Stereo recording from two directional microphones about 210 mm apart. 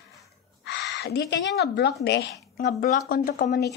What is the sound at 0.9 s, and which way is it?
A woman's voice, 50° left (ahead or behind).